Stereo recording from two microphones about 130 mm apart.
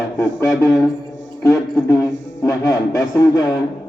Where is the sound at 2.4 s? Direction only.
25° left (ahead or behind).